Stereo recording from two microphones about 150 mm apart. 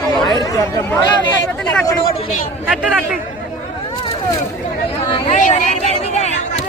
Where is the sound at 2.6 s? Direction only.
5° right (ahead or behind).